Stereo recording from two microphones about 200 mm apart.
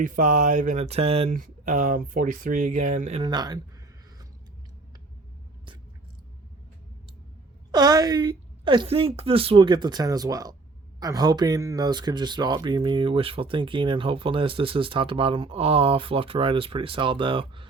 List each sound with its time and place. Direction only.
0.0 s speech: 40° right (ahead or behind); by 3.6 s 20° right (ahead or behind)
7.7 s speech: 20° right (ahead or behind)